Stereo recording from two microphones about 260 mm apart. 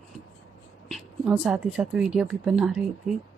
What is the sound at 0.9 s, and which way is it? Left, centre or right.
A woman's voice, centre.